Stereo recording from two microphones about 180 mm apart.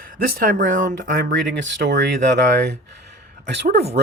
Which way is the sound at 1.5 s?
75° right (ahead or behind).